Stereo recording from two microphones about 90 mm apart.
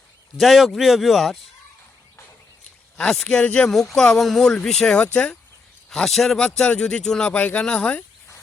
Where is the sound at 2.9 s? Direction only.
5° left (ahead or behind).